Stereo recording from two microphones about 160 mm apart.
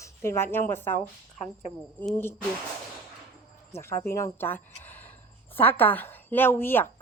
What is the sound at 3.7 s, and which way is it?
A woman's voice, 15° left (ahead or behind).